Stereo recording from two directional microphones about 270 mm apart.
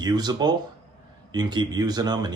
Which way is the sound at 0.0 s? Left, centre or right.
Centre.